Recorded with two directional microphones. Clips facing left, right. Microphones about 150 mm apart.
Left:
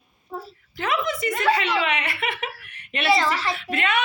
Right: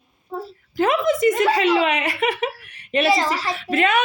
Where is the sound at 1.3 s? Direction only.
20° right (ahead or behind).